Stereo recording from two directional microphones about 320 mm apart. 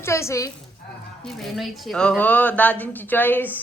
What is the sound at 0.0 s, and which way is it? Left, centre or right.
A woman's voice, centre.